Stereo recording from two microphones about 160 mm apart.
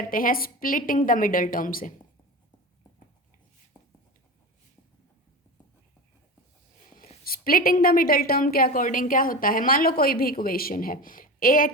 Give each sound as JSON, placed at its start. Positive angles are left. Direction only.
{"t": 0.1, "sound": "a woman's voice", "side_deg": 60}
{"t": 7.3, "sound": "a woman's voice", "side_deg": 65}